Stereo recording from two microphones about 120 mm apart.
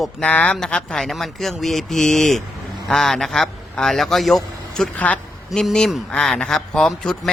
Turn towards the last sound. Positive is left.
turn(degrees=0)  # may be behind; listen again after turning